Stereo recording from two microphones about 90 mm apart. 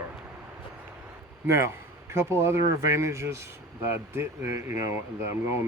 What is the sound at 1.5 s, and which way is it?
Speech, 30° right (ahead or behind).